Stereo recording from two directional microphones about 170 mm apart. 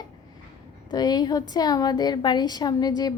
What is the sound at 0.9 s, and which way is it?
A woman's voice, 25° left (ahead or behind).